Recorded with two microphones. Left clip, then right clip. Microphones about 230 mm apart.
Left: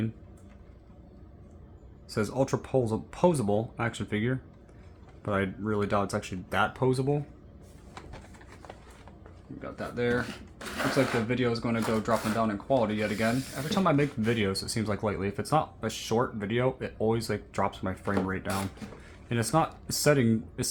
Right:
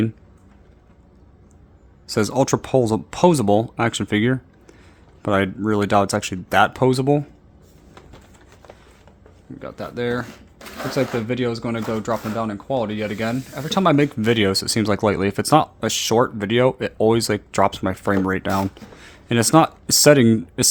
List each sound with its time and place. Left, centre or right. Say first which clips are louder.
2.0 s speech: right 10 dB; right
9.6 s speech: right 5 dB; right